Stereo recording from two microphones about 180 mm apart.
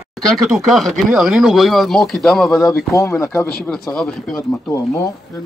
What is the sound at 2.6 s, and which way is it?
Speech, 15° left (ahead or behind).